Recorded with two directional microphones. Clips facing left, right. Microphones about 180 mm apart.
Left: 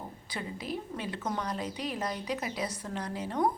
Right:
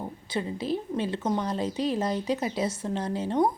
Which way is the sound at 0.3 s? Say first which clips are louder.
Right 8 dB; 30° right (ahead or behind).